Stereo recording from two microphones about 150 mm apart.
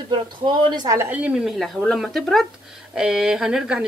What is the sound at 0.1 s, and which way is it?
Speech, 30° right (ahead or behind).